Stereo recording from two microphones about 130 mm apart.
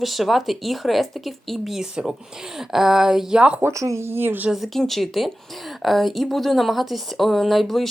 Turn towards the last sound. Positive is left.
turn(degrees=0)  # may be behind; listen again after turning